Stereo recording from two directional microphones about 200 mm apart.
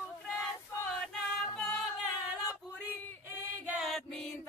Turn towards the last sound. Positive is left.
turn(degrees=-5)  # may be behind; listen again after turning